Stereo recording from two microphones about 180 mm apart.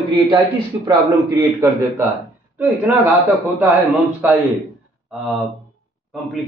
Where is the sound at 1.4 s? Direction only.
15° right (ahead or behind).